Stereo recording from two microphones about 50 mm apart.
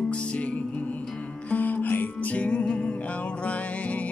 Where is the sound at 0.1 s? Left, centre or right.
Left.